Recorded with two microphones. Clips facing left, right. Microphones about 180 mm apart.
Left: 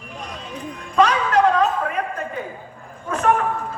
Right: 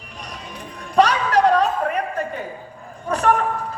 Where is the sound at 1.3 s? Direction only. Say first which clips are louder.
Right 1 dB; 35° right (ahead or behind).